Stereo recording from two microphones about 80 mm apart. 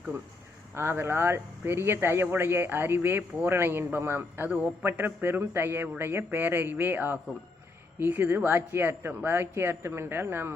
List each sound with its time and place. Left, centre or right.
0.7 s speech: right